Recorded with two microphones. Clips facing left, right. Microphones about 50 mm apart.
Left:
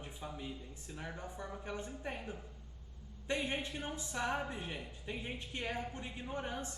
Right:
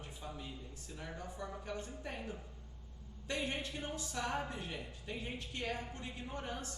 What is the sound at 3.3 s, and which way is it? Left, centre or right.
A man's voice, left.